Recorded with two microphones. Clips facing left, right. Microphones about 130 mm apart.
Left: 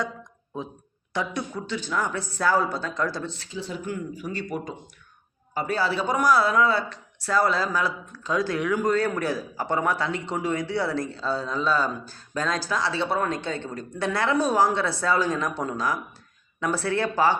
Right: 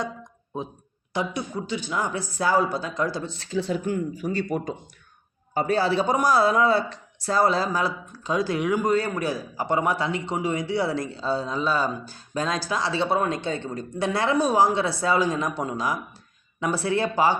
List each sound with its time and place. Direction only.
1.1 s speech: 10° right (ahead or behind)
3.8 s a man's voice: 35° right (ahead or behind); by 17.3 s 15° right (ahead or behind)